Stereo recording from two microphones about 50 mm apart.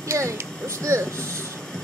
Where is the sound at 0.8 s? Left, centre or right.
Right.